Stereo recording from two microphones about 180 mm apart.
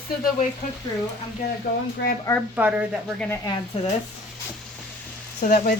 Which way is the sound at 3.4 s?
30° left (ahead or behind).